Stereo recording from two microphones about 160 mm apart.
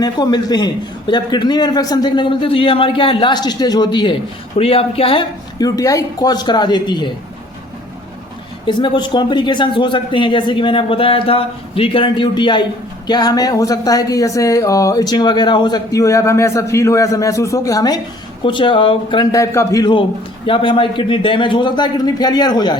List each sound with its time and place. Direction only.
0.0 s a man's voice: 25° left (ahead or behind)
5.5 s a man's voice: 25° left (ahead or behind)
8.6 s a man's voice: 30° left (ahead or behind)